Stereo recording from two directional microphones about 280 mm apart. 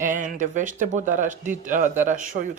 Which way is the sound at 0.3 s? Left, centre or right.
Right.